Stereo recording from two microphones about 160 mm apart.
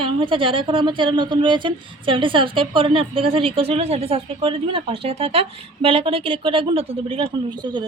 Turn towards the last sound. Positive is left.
turn(degrees=-35)  # may be behind; listen again after turning